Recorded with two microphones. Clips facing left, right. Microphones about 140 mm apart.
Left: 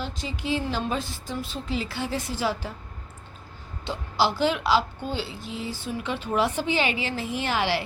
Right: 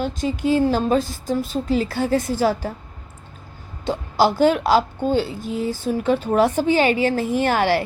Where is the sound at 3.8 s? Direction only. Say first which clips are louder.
Right 6 dB; 45° right (ahead or behind).